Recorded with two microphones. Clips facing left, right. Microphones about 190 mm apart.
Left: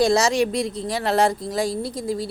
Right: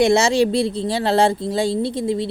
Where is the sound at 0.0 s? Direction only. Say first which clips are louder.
Right 3 dB; 25° right (ahead or behind).